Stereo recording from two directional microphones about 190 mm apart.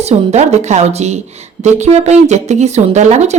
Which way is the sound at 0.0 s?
35° right (ahead or behind).